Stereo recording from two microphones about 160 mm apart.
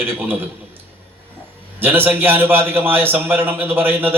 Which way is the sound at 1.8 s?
15° right (ahead or behind).